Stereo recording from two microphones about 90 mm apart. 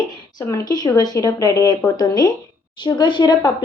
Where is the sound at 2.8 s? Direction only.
60° left (ahead or behind).